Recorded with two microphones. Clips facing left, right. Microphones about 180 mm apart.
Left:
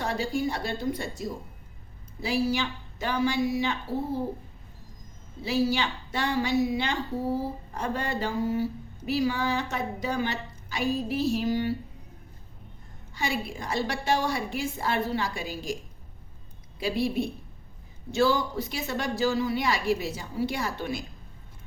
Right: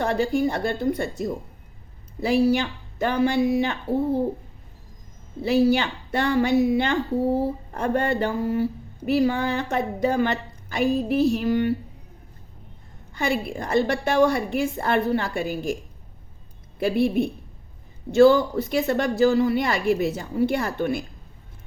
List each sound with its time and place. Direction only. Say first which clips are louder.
0.0 s a sound: right 7 dB; 60° right (ahead or behind)
0.3 s a woman's voice: right 6 dB; 55° right (ahead or behind)
5.4 s a woman's voice: right 7 dB; 60° right (ahead or behind)
13.1 s a woman's voice: right 6 dB; 60° right (ahead or behind)
16.8 s a woman's voice: right 6 dB; 60° right (ahead or behind)